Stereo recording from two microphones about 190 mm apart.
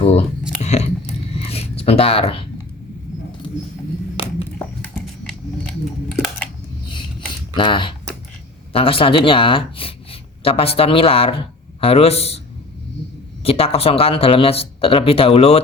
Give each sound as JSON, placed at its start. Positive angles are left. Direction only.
{"t": 0.0, "sound": "a sound", "side_deg": 35}
{"t": 1.4, "sound": "zipper", "side_deg": 30}
{"t": 7.5, "sound": "speech", "side_deg": 25}
{"t": 13.4, "sound": "speech", "side_deg": 30}